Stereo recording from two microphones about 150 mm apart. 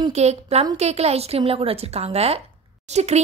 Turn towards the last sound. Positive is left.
turn(degrees=-50)  # may be behind; listen again after turning